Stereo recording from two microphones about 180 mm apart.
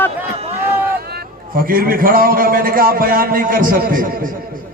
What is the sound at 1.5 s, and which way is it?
A man's voice, 55° right (ahead or behind).